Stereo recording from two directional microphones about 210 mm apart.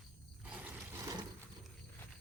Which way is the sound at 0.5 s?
10° right (ahead or behind).